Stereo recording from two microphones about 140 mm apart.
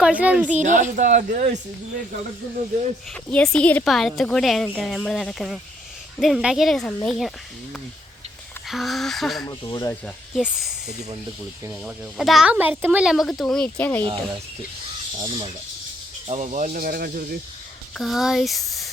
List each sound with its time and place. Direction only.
0.0 s a woman's voice: 10° right (ahead or behind)
0.6 s speech: 60° right (ahead or behind)
3.3 s a woman's voice: 5° left (ahead or behind)
9.5 s speech: 30° left (ahead or behind)
10.3 s a woman's voice: centre (ahead or behind)
12.1 s speech: centre (ahead or behind)
15.2 s speech: 40° right (ahead or behind)
16.3 s speech: 60° right (ahead or behind); by 17.2 s 90° right
17.9 s speech: centre (ahead or behind)